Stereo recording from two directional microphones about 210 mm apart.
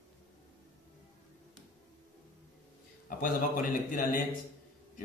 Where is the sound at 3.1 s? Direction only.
40° left (ahead or behind).